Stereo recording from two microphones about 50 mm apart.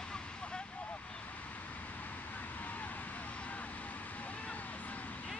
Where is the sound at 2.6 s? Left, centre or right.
Left.